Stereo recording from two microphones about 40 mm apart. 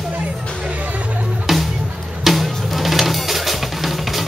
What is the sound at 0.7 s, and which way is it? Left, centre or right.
Music, right.